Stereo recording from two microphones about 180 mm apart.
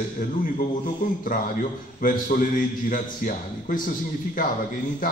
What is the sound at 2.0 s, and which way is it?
A man's voice, 50° left (ahead or behind).